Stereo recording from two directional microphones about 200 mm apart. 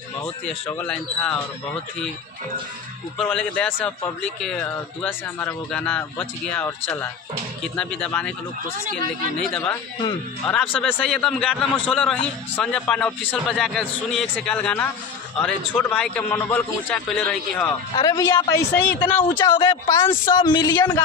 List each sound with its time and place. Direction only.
0.7 s a man's voice: 10° left (ahead or behind)
3.2 s a man's voice: 5° left (ahead or behind)
9.6 s a man's voice: 15° left (ahead or behind)
17.9 s a man's voice: 20° left (ahead or behind)
19.3 s speech: 25° left (ahead or behind)